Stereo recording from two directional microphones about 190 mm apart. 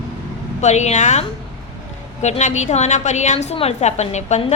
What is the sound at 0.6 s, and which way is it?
A woman's voice, 35° left (ahead or behind).